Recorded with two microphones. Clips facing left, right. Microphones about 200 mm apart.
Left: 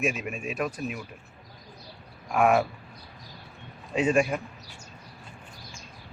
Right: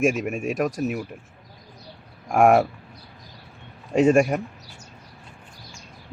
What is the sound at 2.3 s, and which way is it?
Speech, 50° right (ahead or behind).